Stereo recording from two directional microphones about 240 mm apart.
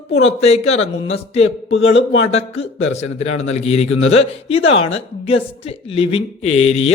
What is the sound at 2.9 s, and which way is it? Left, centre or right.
Speech, left.